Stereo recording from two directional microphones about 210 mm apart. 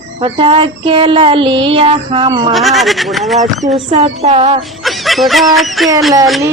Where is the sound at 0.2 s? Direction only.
25° right (ahead or behind).